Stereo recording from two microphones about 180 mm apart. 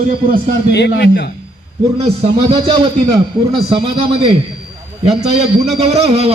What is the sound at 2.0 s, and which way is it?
A man's voice, 30° right (ahead or behind).